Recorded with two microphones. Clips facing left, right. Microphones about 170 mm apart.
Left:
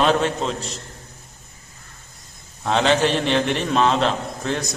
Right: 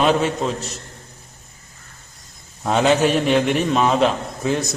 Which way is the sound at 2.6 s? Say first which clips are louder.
Right 2 dB; 5° right (ahead or behind).